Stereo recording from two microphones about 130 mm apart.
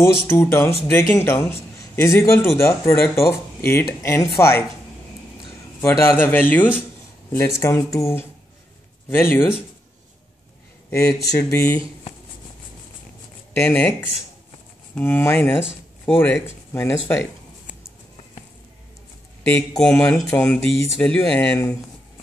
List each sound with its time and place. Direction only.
0.0 s a man's voice: 20° left (ahead or behind)
5.8 s a man's voice: 15° left (ahead or behind)
10.9 s a man's voice: 25° left (ahead or behind)
13.5 s speech: 15° left (ahead or behind)
19.8 s speech: 10° left (ahead or behind)